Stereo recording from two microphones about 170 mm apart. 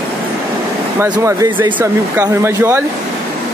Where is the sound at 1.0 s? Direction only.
15° right (ahead or behind).